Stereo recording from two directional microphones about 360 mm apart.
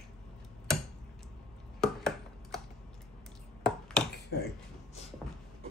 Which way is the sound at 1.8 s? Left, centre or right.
Centre.